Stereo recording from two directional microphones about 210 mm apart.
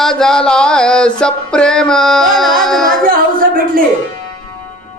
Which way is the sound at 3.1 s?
40° right (ahead or behind).